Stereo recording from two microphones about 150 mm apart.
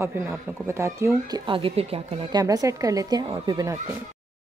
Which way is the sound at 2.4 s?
20° right (ahead or behind).